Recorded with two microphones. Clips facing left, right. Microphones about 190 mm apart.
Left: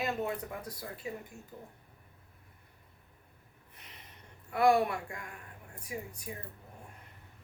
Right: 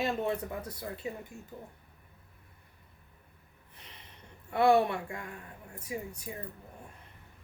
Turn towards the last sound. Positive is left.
turn(degrees=-25)  # may be behind; listen again after turning